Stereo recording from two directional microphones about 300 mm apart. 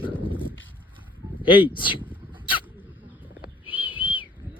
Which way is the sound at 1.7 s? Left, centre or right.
Centre.